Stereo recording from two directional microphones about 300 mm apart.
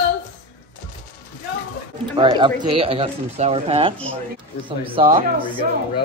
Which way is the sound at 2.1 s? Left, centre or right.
Centre.